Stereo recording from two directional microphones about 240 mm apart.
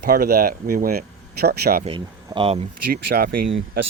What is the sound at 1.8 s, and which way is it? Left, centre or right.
Speech, right.